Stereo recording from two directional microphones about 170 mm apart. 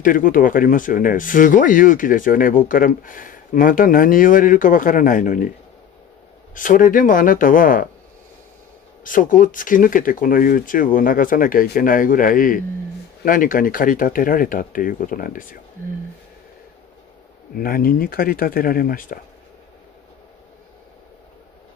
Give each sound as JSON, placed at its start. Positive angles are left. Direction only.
{"t": 0.0, "sound": "speech", "side_deg": 55}
{"t": 6.5, "sound": "speech", "side_deg": 50}
{"t": 9.0, "sound": "speech", "side_deg": 50}
{"t": 17.6, "sound": "speech", "side_deg": 60}